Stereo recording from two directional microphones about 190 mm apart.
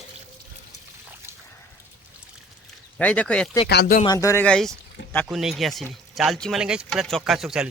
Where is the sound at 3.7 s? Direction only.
60° left (ahead or behind).